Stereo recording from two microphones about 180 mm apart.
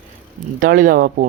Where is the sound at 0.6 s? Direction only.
50° right (ahead or behind).